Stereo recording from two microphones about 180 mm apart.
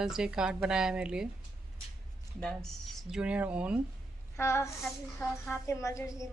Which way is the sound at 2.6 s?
5° right (ahead or behind).